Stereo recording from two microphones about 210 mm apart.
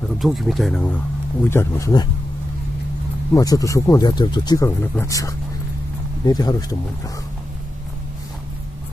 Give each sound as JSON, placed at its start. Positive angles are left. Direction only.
{"t": 0.2, "sound": "speech", "side_deg": 0}
{"t": 1.5, "sound": "speech", "side_deg": 15}
{"t": 3.3, "sound": "speech", "side_deg": 15}